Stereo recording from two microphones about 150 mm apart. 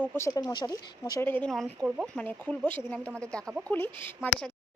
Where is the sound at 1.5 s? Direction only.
Centre (ahead or behind).